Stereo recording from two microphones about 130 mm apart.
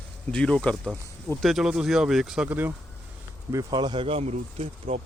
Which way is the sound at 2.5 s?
15° right (ahead or behind).